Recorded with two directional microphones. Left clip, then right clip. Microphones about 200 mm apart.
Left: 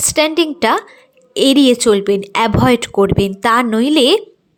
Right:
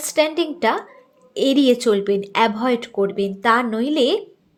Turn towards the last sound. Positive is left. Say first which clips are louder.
# left 7 dB
turn(degrees=30)  # may be behind; listen again after turning